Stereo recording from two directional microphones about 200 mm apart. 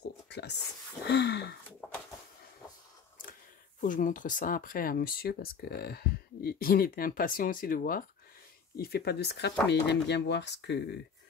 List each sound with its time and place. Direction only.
0.3 s speech: 55° left (ahead or behind)
1.0 s a sound: 55° left (ahead or behind)
3.8 s speech: 40° left (ahead or behind); by 11.0 s 60° left (ahead or behind)